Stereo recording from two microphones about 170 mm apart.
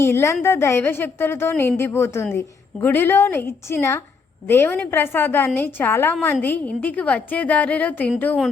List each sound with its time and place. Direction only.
0.0 s a woman's voice: 15° left (ahead or behind)